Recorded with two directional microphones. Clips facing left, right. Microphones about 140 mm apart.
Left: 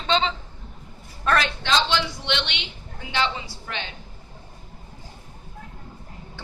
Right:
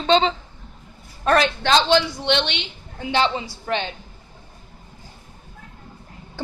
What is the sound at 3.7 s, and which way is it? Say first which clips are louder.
Speech: right 10 dB; 35° right (ahead or behind).